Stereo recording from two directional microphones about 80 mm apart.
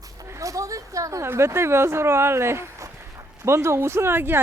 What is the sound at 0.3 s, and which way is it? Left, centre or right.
A woman's voice, right.